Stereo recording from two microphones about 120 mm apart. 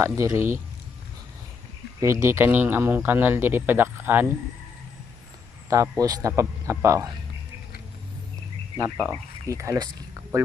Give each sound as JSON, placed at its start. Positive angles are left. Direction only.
{"t": 0.0, "sound": "speech", "side_deg": -25}
{"t": 2.0, "sound": "speech", "side_deg": -25}
{"t": 5.6, "sound": "speech", "side_deg": -30}
{"t": 8.8, "sound": "speech", "side_deg": -20}